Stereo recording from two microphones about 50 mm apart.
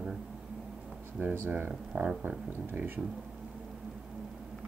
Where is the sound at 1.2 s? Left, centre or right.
Right.